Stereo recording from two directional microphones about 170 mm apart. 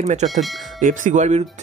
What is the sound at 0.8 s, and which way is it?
Speech, 50° right (ahead or behind).